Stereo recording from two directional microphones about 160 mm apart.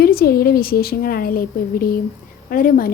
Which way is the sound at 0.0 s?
70° left (ahead or behind).